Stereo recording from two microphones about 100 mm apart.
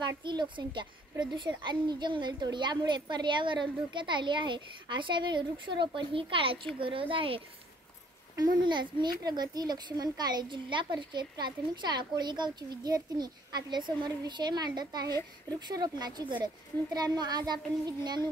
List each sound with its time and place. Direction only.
0.0 s speech: 50° right (ahead or behind)
8.4 s speech: 50° right (ahead or behind)